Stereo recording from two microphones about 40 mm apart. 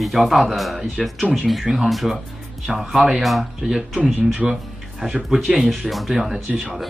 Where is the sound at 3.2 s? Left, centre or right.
Centre.